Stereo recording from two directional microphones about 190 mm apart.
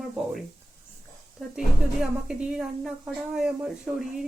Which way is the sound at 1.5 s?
5° right (ahead or behind).